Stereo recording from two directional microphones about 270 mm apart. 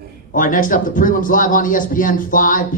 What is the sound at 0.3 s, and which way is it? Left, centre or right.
A man's voice, left.